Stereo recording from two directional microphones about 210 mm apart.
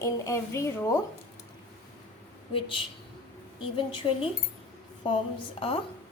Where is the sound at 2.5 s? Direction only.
25° left (ahead or behind).